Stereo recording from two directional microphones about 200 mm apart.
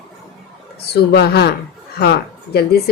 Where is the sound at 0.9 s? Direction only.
55° left (ahead or behind).